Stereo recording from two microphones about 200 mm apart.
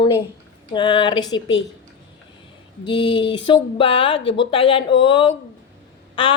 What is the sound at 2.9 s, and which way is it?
Speech, 25° left (ahead or behind).